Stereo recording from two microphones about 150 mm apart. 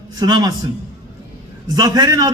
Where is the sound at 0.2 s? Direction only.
25° right (ahead or behind).